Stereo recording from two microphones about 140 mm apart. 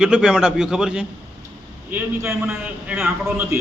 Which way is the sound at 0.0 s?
5° right (ahead or behind).